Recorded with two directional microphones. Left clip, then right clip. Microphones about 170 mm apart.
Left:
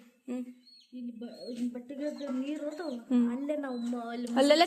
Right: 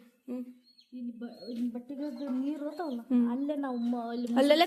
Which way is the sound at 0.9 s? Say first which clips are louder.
Right 1 dB; 85° right.